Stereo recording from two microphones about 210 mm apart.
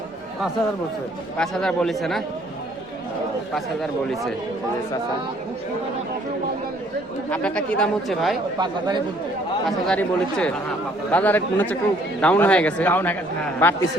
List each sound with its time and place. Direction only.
1.4 s speech: 5° left (ahead or behind)
3.5 s speech: centre (ahead or behind)
7.3 s speech: 5° left (ahead or behind)
8.5 s speech: 20° right (ahead or behind)
9.6 s speech: 5° left (ahead or behind)